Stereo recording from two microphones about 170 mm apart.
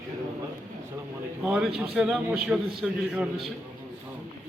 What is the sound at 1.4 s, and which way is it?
A man's voice, 5° right (ahead or behind).